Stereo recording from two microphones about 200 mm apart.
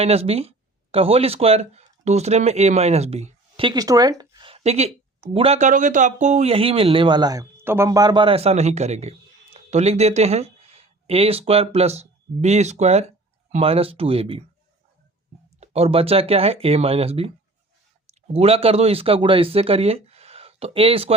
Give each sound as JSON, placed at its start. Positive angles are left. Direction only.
{"t": 0.0, "sound": "speech", "side_deg": -30}
{"t": 15.6, "sound": "speech", "side_deg": -30}